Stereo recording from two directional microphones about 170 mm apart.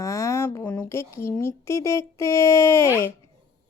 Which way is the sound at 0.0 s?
15° left (ahead or behind).